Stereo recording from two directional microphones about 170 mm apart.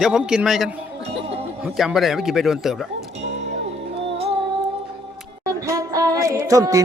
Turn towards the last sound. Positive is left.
turn(degrees=-20)  # may be behind; listen again after turning